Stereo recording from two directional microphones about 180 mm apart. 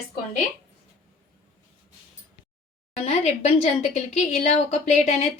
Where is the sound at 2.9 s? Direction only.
35° left (ahead or behind).